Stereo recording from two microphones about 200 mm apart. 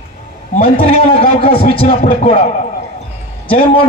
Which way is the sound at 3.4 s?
25° left (ahead or behind).